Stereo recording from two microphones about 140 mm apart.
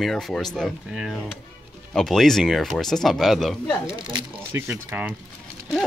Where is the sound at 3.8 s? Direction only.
35° right (ahead or behind).